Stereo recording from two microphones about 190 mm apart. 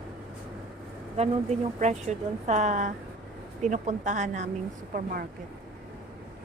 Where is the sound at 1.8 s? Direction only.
35° right (ahead or behind).